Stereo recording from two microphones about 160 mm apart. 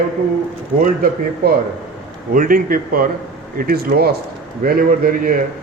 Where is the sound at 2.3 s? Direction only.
60° right (ahead or behind).